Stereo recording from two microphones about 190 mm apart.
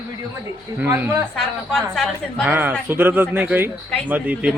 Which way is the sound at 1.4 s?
Centre (ahead or behind).